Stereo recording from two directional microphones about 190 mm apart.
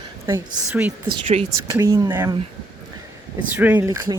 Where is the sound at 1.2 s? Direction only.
35° right (ahead or behind).